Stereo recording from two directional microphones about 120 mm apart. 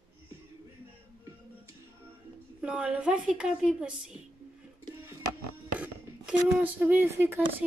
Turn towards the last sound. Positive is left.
turn(degrees=-20)  # may be behind; listen again after turning